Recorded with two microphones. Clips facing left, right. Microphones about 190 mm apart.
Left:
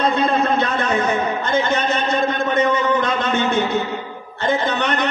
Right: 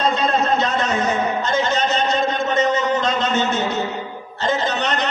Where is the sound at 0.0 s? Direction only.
55° left (ahead or behind).